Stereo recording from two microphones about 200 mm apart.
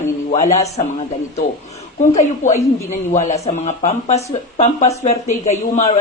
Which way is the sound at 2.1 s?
35° left (ahead or behind).